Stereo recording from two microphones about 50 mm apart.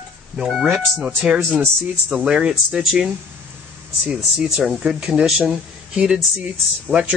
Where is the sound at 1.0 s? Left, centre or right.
Right.